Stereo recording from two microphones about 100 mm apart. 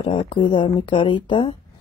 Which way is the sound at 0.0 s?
65° left (ahead or behind).